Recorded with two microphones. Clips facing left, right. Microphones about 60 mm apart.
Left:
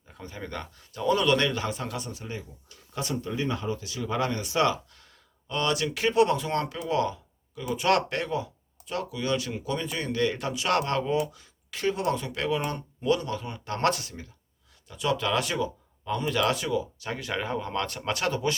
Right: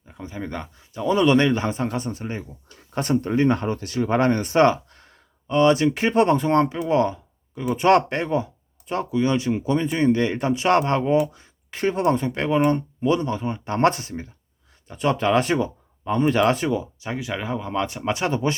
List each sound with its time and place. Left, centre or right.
0.1 s speech: centre; by 16.8 s right
17.0 s speech: centre